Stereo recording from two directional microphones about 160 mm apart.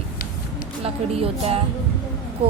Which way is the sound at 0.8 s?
40° right (ahead or behind).